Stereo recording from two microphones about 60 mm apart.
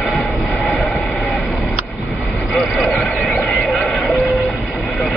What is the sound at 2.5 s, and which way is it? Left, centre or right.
Vehicle, centre.